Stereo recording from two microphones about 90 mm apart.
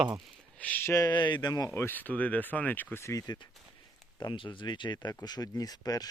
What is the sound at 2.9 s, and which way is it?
Speech, 35° left (ahead or behind).